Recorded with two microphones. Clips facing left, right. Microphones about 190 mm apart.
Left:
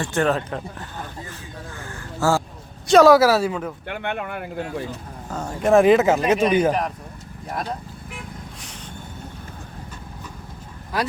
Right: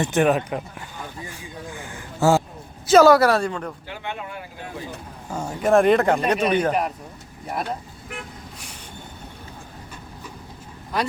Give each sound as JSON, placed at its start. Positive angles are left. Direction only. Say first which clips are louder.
{"t": 0.0, "sound": "speech", "louder": "right 2 dB", "side_deg": -15}
{"t": 2.8, "sound": "speech", "louder": "left 1 dB", "side_deg": 0}
{"t": 3.8, "sound": "speech", "louder": "left 5 dB", "side_deg": 60}
{"t": 5.3, "sound": "speech", "louder": "left 1 dB", "side_deg": -10}